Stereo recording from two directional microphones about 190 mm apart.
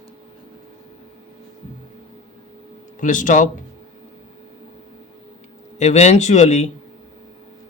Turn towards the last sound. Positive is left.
turn(degrees=35)  # may be behind; listen again after turning